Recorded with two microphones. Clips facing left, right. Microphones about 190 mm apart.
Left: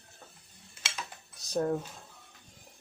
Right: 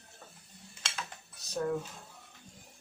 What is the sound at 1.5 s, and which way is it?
Speech, 35° left (ahead or behind).